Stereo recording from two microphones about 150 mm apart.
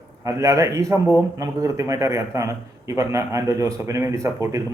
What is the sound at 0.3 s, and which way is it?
A man's voice, 20° right (ahead or behind).